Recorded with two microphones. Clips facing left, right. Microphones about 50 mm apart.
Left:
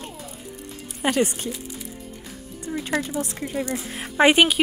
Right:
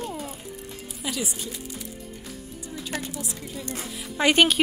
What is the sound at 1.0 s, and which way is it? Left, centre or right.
Speech, left.